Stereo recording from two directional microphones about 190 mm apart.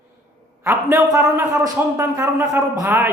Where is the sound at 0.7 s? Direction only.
15° right (ahead or behind).